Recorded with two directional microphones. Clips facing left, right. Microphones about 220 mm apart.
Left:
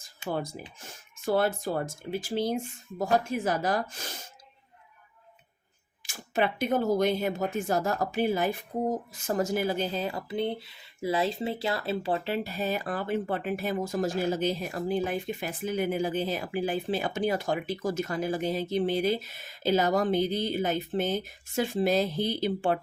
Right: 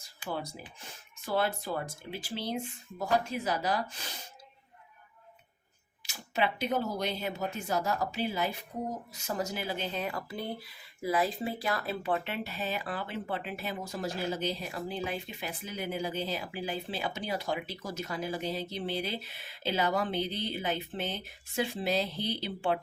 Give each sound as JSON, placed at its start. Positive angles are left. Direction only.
{"t": 0.3, "sound": "speech", "side_deg": 50}
{"t": 6.0, "sound": "speech", "side_deg": 50}